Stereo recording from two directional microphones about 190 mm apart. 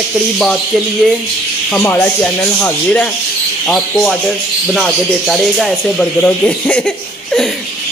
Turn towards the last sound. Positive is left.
turn(degrees=5)  # may be behind; listen again after turning